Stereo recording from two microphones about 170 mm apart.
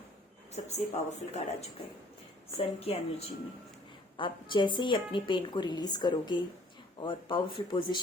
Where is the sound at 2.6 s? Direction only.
35° left (ahead or behind).